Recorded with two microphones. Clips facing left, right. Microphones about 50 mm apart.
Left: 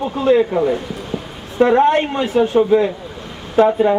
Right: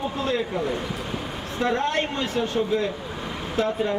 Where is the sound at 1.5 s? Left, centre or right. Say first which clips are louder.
Left 11 dB; centre.